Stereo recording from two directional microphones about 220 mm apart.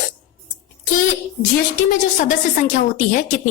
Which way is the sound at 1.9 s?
35° left (ahead or behind).